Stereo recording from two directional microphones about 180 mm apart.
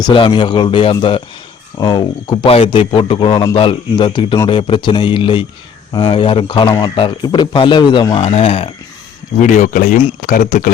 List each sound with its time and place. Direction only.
0.0 s speech: 25° left (ahead or behind)
9.4 s speech: 45° left (ahead or behind)